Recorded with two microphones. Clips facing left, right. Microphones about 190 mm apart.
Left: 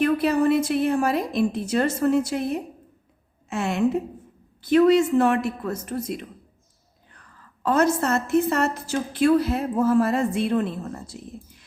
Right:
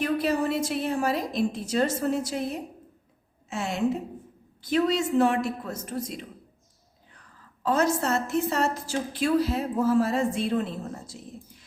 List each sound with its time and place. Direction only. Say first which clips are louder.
0.0 s a woman's voice: left 5 dB; 60° left (ahead or behind)
7.6 s a woman's voice: left 3 dB; 55° left (ahead or behind)